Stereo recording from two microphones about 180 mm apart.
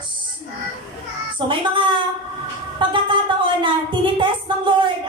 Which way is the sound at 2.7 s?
25° right (ahead or behind).